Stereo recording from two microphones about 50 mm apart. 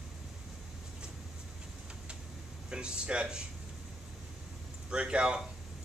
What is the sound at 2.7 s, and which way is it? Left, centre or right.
Speech, centre.